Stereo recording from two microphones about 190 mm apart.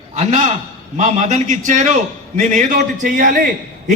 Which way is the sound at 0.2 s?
40° right (ahead or behind).